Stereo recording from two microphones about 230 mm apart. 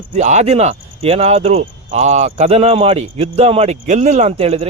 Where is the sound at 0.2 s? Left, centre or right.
Right.